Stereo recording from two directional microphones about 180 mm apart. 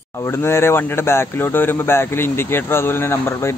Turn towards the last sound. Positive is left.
turn(degrees=15)  # may be behind; listen again after turning